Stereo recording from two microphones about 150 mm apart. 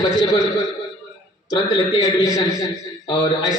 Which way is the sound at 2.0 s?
25° left (ahead or behind).